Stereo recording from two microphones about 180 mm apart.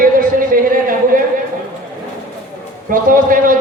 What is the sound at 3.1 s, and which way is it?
Speech, 50° right (ahead or behind).